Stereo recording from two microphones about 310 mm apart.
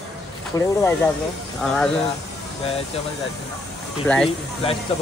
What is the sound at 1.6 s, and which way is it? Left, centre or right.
Speech, centre.